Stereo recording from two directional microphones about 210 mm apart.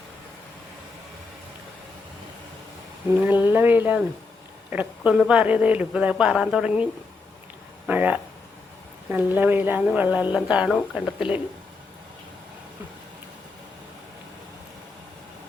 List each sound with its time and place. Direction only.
3.2 s speech: 10° right (ahead or behind)
7.9 s speech: 5° right (ahead or behind)